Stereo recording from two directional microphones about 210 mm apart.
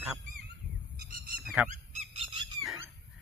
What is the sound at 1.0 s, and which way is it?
Honk, 45° right (ahead or behind).